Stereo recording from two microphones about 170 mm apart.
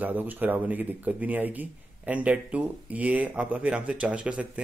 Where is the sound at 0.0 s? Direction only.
10° right (ahead or behind).